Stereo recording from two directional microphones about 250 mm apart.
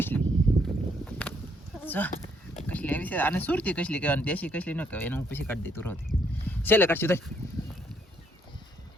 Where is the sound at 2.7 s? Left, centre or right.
Centre.